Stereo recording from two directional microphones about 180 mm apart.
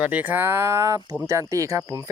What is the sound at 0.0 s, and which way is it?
Speech, 10° right (ahead or behind).